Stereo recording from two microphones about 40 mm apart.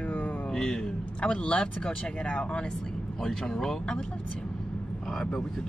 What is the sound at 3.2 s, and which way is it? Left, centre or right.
Speech, centre.